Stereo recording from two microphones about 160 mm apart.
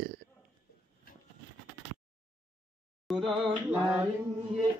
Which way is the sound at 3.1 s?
Centre (ahead or behind).